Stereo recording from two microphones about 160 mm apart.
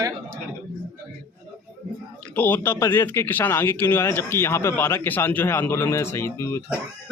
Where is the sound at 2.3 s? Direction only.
10° left (ahead or behind).